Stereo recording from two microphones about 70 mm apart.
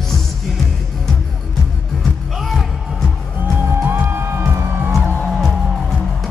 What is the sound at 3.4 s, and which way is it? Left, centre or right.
Music, right.